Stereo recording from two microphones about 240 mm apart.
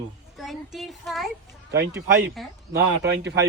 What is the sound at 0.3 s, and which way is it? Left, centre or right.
Speech, centre.